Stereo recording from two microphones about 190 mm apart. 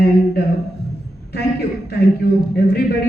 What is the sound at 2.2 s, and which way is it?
Speech, 60° left (ahead or behind).